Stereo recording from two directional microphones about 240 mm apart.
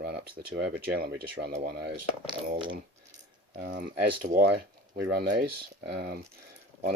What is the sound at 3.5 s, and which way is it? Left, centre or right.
Speech, right.